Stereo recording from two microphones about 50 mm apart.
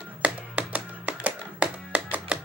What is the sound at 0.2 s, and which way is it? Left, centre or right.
Music, right.